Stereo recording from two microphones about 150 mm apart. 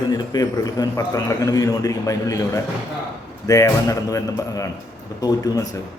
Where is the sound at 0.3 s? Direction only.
25° left (ahead or behind).